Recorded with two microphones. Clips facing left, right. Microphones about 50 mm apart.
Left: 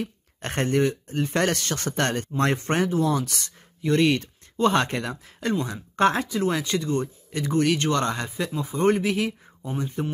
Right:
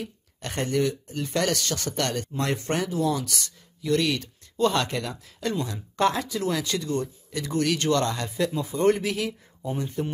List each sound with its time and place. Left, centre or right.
0.0 s speech: left
8.3 s speech: centre